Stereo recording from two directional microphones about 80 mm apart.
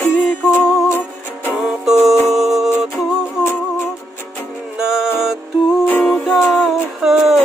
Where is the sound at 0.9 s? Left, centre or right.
Left.